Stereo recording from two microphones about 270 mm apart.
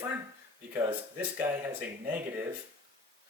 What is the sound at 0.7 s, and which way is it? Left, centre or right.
Speech, centre.